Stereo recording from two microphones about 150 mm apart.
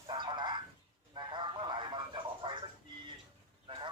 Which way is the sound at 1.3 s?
30° right (ahead or behind).